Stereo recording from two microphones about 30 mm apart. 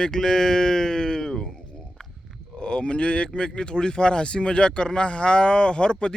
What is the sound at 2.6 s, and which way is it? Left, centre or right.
Speech, left.